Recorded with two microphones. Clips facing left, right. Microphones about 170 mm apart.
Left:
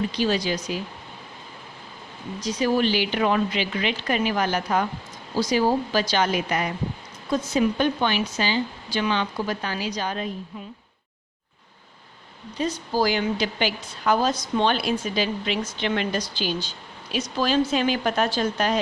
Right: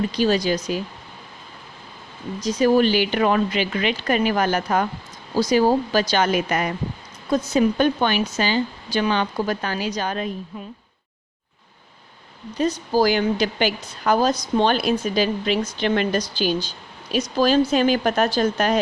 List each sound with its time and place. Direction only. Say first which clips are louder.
0.2 s a woman's voice: right 5 dB; 45° right (ahead or behind)
2.4 s a woman's voice: right 5 dB; 45° right (ahead or behind)
12.5 s a woman's voice: right 4 dB; 45° right (ahead or behind)